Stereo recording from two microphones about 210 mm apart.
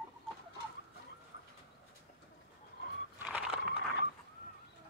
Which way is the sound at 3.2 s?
5° right (ahead or behind).